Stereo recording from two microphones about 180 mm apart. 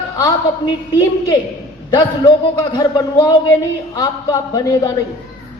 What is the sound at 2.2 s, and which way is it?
A man's voice, 25° left (ahead or behind).